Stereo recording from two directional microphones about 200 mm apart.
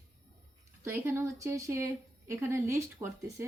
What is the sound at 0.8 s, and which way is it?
Speech, 10° right (ahead or behind).